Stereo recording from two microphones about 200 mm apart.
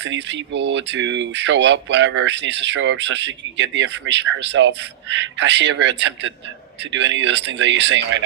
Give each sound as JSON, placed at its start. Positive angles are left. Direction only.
{"t": 0.0, "sound": "speech", "side_deg": -60}